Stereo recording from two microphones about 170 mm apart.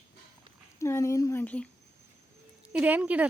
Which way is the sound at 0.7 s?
15° left (ahead or behind).